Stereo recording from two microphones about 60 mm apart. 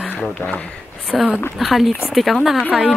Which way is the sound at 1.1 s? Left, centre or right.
Centre.